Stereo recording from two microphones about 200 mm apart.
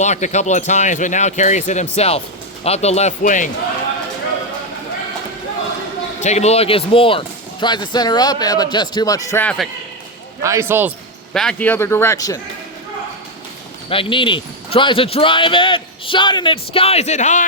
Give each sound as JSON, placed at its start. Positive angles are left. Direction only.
{"t": 0.0, "sound": "speech", "side_deg": 35}
{"t": 6.1, "sound": "speech", "side_deg": 35}
{"t": 10.4, "sound": "speech", "side_deg": -15}
{"t": 11.3, "sound": "speech", "side_deg": 5}
{"t": 13.9, "sound": "speech", "side_deg": 25}